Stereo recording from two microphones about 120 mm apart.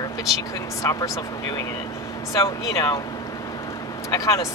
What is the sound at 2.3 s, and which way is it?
Speech, 30° left (ahead or behind).